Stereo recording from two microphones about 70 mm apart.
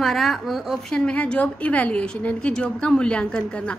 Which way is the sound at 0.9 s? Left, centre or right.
Centre.